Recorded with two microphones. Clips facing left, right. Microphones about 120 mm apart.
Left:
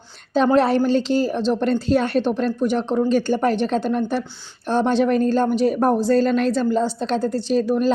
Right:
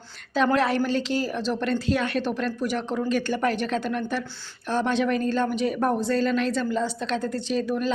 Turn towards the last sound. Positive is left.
turn(degrees=40)  # may be behind; listen again after turning